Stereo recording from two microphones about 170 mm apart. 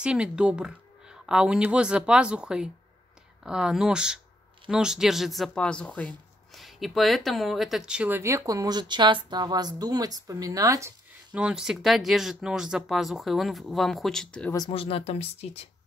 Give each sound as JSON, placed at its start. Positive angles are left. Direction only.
{"t": 0.0, "sound": "speech", "side_deg": -5}
{"t": 11.3, "sound": "speech", "side_deg": -5}
{"t": 14.7, "sound": "speech", "side_deg": 35}